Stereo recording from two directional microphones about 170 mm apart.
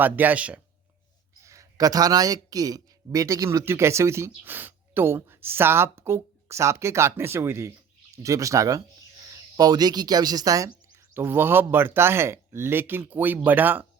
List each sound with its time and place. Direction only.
0.0 s speech: 10° right (ahead or behind)
1.4 s speech: 20° right (ahead or behind)